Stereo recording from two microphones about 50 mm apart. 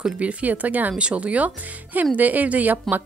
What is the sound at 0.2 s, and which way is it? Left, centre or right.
Speech, right.